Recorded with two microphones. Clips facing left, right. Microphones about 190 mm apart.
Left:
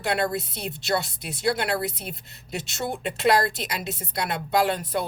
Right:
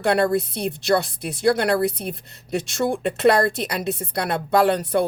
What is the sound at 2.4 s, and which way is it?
Speech, 55° right (ahead or behind).